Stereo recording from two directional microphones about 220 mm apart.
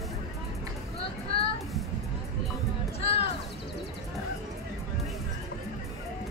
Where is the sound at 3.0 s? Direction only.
25° left (ahead or behind).